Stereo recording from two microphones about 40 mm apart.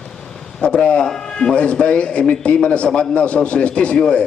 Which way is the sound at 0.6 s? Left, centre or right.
Left.